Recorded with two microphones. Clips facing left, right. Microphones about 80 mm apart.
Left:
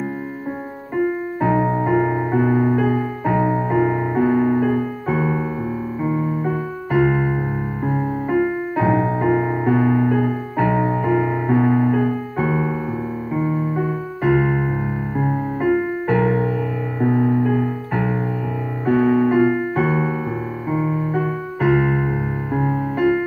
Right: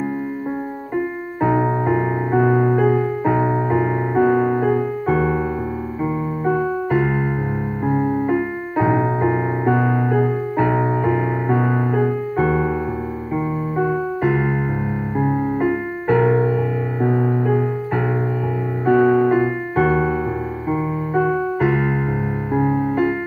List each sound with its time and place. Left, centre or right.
1.4 s music: centre
5.1 s keyboard: centre
6.9 s keyboard: centre
7.8 s music: centre
8.4 s piano: centre
9.8 s music: centre
14.3 s keyboard: centre
15.1 s music: centre
21.5 s keyboard: centre
22.5 s music: centre